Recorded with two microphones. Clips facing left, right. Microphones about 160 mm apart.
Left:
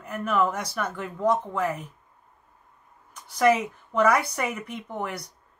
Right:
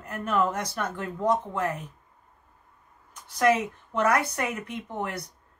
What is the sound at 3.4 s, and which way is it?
Speech, centre (ahead or behind).